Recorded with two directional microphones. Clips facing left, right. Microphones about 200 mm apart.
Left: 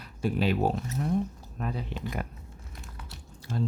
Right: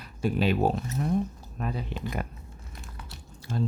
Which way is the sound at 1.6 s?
5° right (ahead or behind).